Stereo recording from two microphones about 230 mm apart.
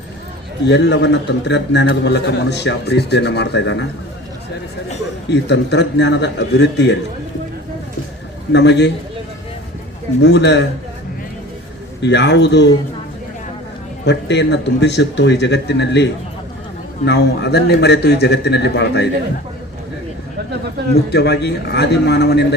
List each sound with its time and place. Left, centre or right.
0.7 s a man's voice: left
5.3 s a man's voice: left
8.5 s a man's voice: left
10.2 s a man's voice: left
12.0 s a man's voice: left
14.0 s a man's voice: left
17.1 s a man's voice: left
21.1 s a man's voice: left